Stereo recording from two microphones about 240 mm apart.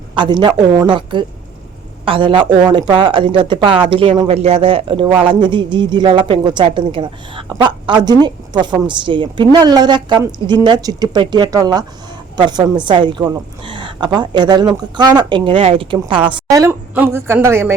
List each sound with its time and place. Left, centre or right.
0.1 s a woman's voice: centre